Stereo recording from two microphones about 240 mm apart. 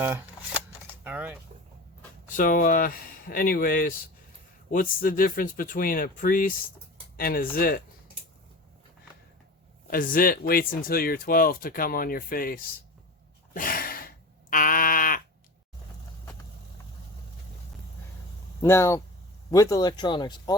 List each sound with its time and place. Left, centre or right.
0.0 s shuffling cards: centre
1.0 s a sound: centre
2.3 s speech: left
9.9 s speech: left
13.5 s a sound: left
18.6 s speech: centre